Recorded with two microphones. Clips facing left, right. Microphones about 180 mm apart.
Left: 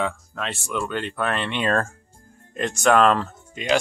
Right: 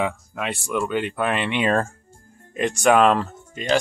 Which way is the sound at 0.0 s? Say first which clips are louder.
Right 2 dB; 10° right (ahead or behind).